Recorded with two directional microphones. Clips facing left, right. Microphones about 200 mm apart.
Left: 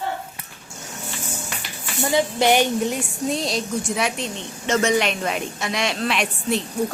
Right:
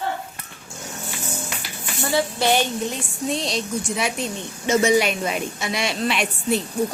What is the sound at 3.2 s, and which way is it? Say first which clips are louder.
A woman's voice: even; centre (ahead or behind).